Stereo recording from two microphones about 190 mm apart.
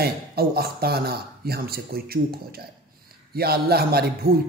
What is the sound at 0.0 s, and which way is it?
A man's voice, 55° right (ahead or behind).